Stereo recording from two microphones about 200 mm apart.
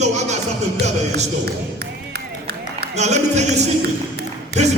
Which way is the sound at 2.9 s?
35° right (ahead or behind).